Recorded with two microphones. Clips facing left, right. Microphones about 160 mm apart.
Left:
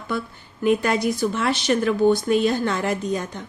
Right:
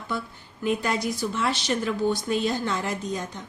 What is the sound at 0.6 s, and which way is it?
A woman's voice, 60° left (ahead or behind).